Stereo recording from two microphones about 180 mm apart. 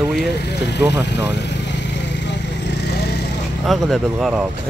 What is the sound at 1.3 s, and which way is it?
Vehicle, 75° left (ahead or behind).